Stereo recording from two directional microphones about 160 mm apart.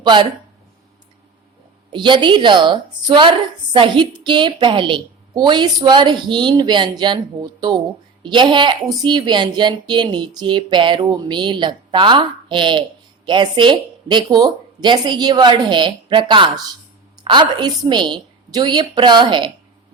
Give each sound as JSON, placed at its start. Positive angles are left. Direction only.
{"t": 0.0, "sound": "speech", "side_deg": -30}
{"t": 1.9, "sound": "a woman's voice", "side_deg": -30}